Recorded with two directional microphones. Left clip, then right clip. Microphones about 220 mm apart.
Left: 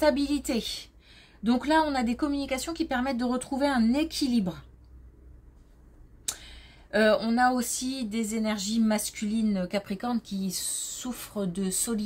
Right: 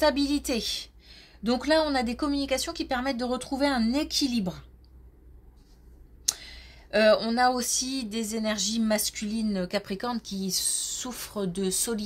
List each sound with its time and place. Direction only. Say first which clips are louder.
0.0 s speech: even; 25° right (ahead or behind)
6.2 s speech: right 6 dB; 25° right (ahead or behind)